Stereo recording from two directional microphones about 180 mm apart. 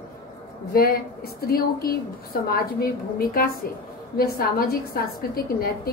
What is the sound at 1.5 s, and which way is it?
A woman's voice, 55° left (ahead or behind).